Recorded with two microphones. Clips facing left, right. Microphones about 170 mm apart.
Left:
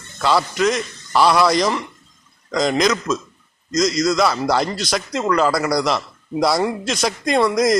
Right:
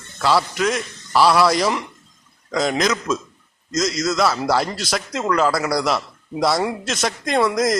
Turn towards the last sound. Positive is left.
turn(degrees=0)  # may be behind; listen again after turning